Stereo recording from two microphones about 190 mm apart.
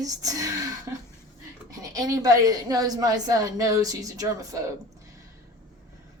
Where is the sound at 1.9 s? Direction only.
20° right (ahead or behind).